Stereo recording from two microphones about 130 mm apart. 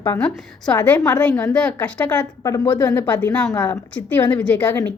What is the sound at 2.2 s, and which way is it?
Speech, 25° left (ahead or behind).